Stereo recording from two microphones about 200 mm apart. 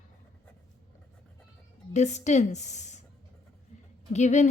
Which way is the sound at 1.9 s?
35° left (ahead or behind).